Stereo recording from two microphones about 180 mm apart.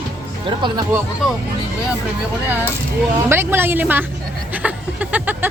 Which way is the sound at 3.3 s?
10° right (ahead or behind).